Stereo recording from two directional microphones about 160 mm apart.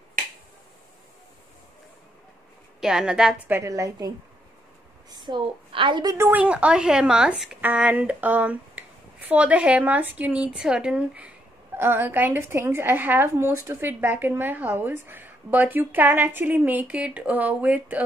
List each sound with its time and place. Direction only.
2.8 s a woman's voice: 5° right (ahead or behind); by 4.1 s 20° right (ahead or behind)
5.1 s a woman's voice: 30° right (ahead or behind)
6.1 s a woman's voice: 15° right (ahead or behind)